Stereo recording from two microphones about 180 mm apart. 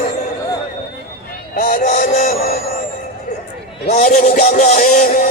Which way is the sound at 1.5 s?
50° left (ahead or behind).